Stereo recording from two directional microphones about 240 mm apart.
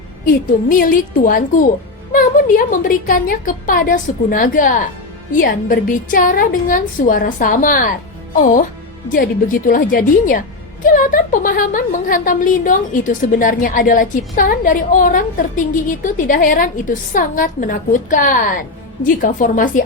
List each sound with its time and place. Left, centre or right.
0.7 s a woman's voice: left
9.0 s a woman's voice: left